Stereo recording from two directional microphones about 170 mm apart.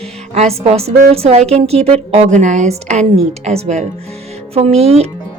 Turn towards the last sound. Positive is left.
turn(degrees=-35)  # may be behind; listen again after turning